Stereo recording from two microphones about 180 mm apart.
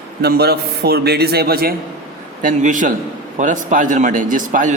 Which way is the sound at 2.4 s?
45° right (ahead or behind).